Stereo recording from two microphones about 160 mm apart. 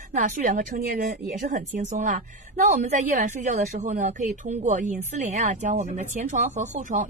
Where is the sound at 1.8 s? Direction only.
55° right (ahead or behind).